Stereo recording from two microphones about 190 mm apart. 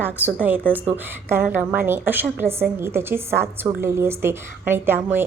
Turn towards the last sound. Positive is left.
turn(degrees=-10)  # may be behind; listen again after turning